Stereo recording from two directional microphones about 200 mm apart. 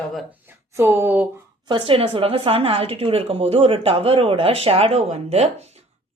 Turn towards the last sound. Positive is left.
turn(degrees=-30)  # may be behind; listen again after turning